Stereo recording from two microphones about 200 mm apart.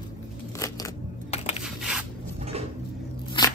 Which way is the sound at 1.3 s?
30° left (ahead or behind).